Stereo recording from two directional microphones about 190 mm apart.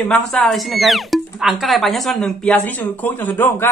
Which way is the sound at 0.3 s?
Centre (ahead or behind).